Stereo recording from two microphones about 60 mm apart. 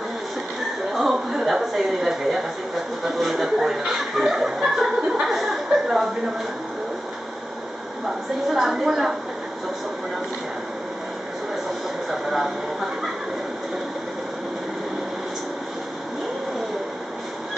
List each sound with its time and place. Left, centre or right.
0.9 s chatter: centre
3.2 s speech: centre
8.5 s a woman's voice: centre
12.1 s speech: centre